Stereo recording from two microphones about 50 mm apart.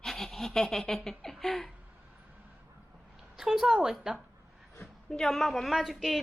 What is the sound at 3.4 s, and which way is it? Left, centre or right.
Speech, centre.